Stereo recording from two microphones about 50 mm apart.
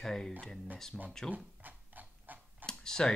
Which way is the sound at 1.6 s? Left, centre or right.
Right.